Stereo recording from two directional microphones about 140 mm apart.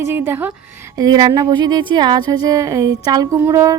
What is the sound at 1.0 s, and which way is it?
A woman's voice, 25° right (ahead or behind).